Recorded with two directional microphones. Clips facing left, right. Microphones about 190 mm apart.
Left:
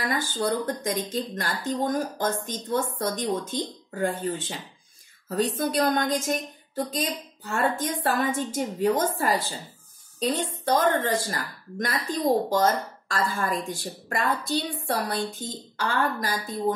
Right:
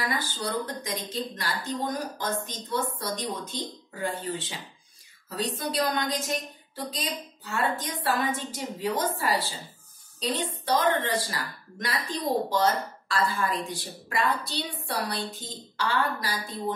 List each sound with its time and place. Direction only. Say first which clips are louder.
0.0 s a woman's voice: left 4 dB; 50° left (ahead or behind)